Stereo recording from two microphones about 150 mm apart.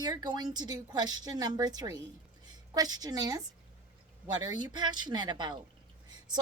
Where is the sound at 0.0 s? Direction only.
25° right (ahead or behind).